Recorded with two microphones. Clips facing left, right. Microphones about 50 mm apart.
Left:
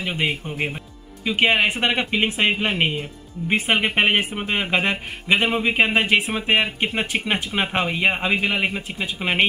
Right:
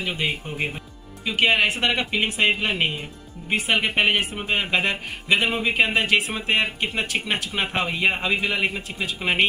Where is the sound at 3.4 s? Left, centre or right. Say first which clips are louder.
Left 2 dB; left.